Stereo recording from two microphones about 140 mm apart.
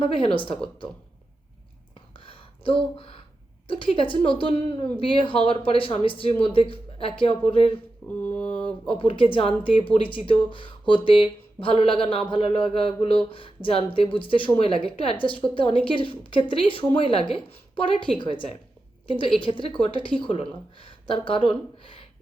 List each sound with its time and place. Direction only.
0.0 s a woman's voice: 40° left (ahead or behind)
2.1 s a sound: 40° left (ahead or behind)
3.7 s a woman's voice: 40° left (ahead or behind)
8.0 s mantra: 10° left (ahead or behind)
8.6 s a woman's voice: 40° left (ahead or behind)